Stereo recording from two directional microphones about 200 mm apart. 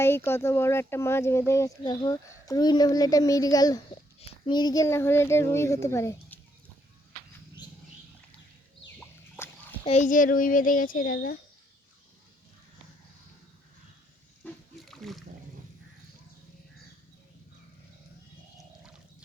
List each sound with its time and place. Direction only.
0.3 s speech: 10° left (ahead or behind)
9.0 s a sound: 10° left (ahead or behind)
9.8 s speech: 35° left (ahead or behind)
14.4 s splash: centre (ahead or behind)